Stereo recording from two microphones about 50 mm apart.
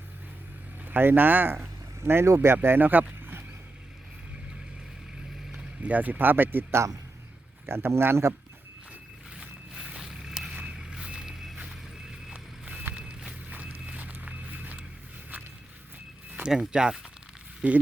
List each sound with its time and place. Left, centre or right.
0.9 s speech: right
2.0 s speech: right
2.8 s boat: right
5.8 s speech: right
6.7 s speech: right
9.7 s walk: centre
10.0 s a sound: centre
12.9 s walk: right
13.5 s walk: right
16.3 s speech: centre
17.6 s speech: right